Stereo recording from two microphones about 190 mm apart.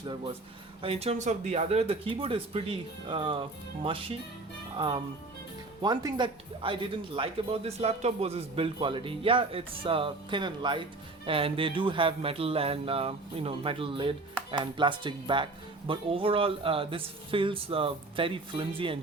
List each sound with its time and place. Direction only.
0.8 s speech: 30° right (ahead or behind)
4.8 s speech: 25° right (ahead or behind)